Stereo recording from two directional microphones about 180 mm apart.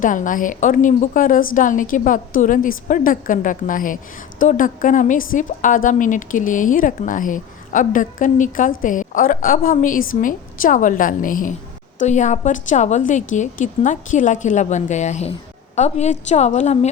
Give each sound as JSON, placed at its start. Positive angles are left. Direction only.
{"t": 0.0, "sound": "a woman's voice", "side_deg": 45}